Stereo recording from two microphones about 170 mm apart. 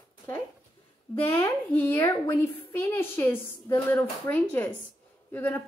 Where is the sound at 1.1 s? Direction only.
15° left (ahead or behind).